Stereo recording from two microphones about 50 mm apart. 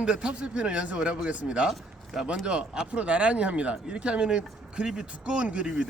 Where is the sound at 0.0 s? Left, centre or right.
Centre.